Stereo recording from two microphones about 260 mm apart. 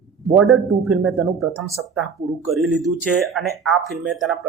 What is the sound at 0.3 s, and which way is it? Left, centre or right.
Speech, centre.